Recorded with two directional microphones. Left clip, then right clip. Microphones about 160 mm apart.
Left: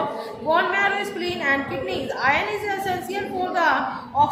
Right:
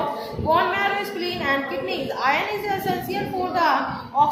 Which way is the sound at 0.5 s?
20° left (ahead or behind).